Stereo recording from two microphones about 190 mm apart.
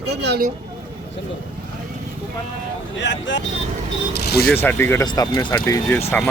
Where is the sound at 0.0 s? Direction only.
60° right (ahead or behind).